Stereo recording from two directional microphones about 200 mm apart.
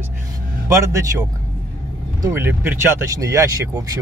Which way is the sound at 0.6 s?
15° right (ahead or behind).